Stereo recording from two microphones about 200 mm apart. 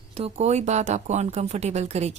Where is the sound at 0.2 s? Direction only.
35° right (ahead or behind).